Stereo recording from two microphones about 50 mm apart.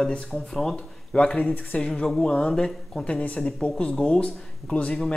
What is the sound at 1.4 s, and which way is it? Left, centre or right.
Speech, left.